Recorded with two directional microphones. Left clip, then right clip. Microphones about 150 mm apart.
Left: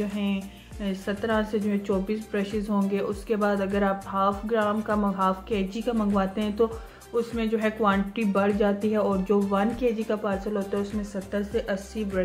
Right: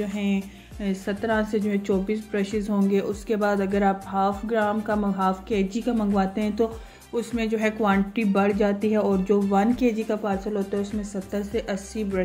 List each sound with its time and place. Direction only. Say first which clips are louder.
0.0 s speech: right 2 dB; 30° right (ahead or behind)